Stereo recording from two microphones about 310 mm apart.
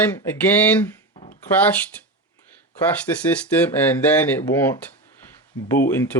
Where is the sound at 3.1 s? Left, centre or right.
Centre.